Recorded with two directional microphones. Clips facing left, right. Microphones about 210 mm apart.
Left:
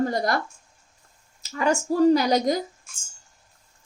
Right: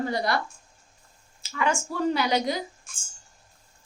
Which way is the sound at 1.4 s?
40° left (ahead or behind).